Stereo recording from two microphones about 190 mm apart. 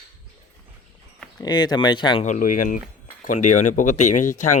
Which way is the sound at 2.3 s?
45° left (ahead or behind).